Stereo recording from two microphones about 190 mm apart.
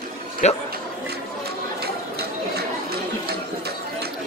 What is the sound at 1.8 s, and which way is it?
Chatter, 55° right (ahead or behind).